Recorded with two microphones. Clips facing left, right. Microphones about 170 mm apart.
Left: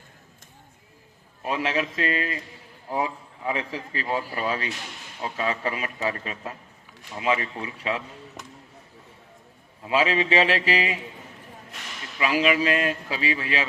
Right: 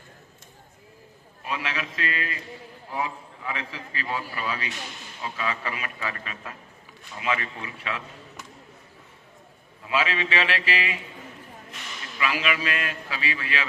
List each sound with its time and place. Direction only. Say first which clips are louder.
1.4 s a man's voice: left 6 dB; 40° left (ahead or behind)
9.8 s a man's voice: left 4 dB; 40° left (ahead or behind)
12.2 s a man's voice: left 5 dB; 35° left (ahead or behind)